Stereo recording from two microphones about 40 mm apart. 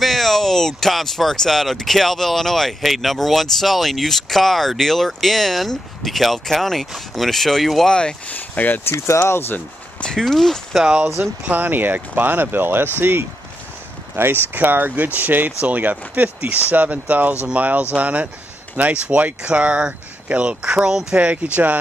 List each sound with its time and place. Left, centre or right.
0.0 s speech: centre
7.9 s speech: centre
8.3 s speech: left
8.8 s speech: left
10.2 s speech: centre
11.2 s speech: right
11.5 s speech: right
14.1 s speech: right
14.5 s speech: right